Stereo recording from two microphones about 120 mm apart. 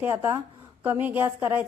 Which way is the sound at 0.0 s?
20° right (ahead or behind).